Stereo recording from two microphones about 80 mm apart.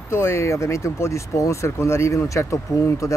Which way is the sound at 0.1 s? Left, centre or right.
Left.